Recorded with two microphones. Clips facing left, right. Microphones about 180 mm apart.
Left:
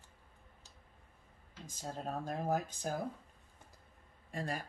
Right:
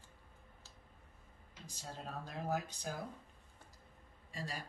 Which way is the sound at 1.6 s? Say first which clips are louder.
Left 6 dB; 45° left (ahead or behind).